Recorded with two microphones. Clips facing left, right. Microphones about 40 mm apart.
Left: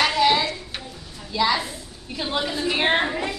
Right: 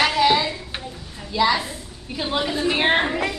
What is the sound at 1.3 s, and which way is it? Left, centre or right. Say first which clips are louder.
A woman's voice: right 2 dB; centre.